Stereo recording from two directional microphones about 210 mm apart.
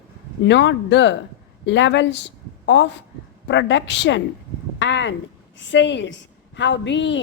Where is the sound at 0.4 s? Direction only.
55° left (ahead or behind).